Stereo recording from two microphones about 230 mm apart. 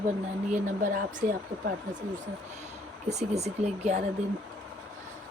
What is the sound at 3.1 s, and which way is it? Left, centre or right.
Speech, right.